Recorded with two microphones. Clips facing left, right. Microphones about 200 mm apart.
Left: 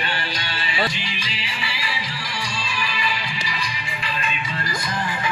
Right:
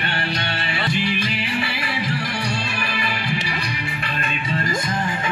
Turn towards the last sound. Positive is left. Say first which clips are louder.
# right 2 dB
turn(degrees=-25)  # may be behind; listen again after turning